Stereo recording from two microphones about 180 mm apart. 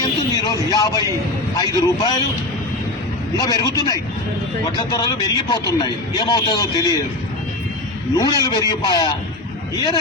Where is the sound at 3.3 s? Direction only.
20° left (ahead or behind).